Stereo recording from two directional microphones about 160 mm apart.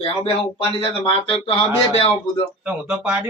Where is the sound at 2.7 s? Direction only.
10° right (ahead or behind).